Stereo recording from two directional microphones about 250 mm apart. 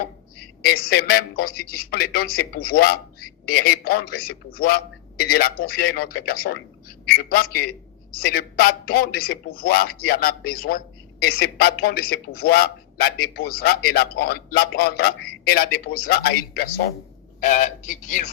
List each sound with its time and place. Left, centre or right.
0.0 s a man's voice: left